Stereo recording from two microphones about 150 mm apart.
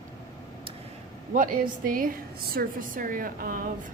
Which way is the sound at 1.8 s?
65° right (ahead or behind).